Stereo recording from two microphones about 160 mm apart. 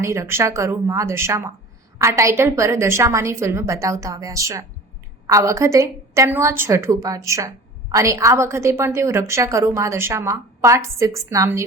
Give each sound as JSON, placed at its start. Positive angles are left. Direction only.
{"t": 0.0, "sound": "a woman's voice", "side_deg": -15}